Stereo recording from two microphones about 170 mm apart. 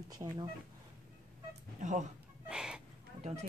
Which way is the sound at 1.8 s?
45° right (ahead or behind).